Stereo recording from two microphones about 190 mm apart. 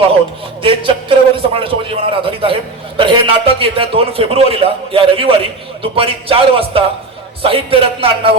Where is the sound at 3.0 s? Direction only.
25° right (ahead or behind).